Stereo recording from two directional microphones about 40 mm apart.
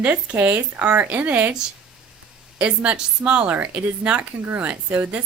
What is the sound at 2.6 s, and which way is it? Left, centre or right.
Speech, right.